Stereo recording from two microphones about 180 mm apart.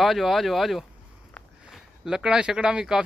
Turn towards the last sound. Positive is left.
turn(degrees=-5)  # may be behind; listen again after turning